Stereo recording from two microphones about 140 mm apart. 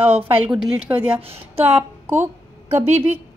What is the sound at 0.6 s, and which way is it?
A woman's voice, 10° right (ahead or behind).